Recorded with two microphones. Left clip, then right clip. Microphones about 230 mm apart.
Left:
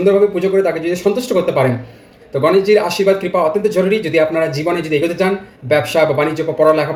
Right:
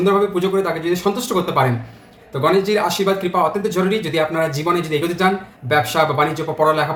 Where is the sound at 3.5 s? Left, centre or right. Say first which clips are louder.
Left 5 dB; centre.